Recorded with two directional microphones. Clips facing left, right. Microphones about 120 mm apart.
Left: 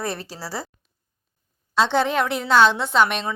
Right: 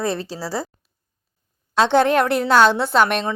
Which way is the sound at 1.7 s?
55° right (ahead or behind).